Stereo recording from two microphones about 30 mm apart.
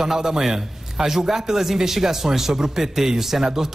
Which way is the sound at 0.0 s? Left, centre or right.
Centre.